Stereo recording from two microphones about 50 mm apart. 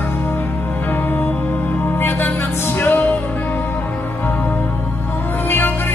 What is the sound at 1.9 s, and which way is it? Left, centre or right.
Music, left.